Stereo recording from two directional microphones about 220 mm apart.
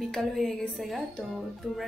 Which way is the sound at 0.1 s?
Centre (ahead or behind).